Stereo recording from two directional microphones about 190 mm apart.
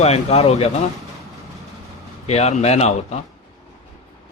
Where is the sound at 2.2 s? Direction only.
35° left (ahead or behind).